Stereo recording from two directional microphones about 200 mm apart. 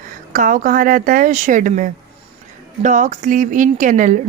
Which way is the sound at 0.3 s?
45° right (ahead or behind).